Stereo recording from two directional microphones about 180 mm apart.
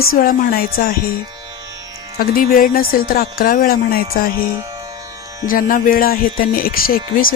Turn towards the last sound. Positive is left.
turn(degrees=55)  # may be behind; listen again after turning